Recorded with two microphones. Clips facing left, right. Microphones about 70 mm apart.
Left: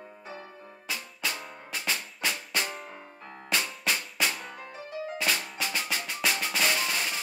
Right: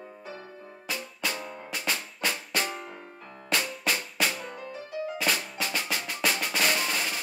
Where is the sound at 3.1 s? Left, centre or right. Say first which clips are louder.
Left 1 dB; left.